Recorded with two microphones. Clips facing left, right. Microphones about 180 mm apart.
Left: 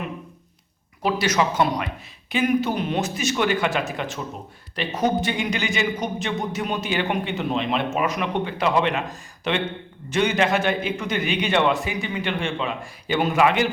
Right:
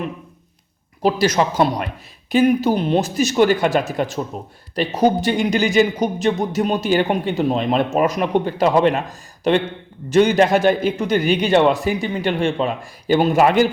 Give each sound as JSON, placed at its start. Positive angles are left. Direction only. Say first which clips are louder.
{"t": 1.0, "sound": "a man's voice", "louder": "right 5 dB", "side_deg": -35}